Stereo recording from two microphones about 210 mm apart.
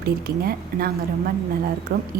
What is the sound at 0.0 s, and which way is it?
A woman's voice, 45° right (ahead or behind).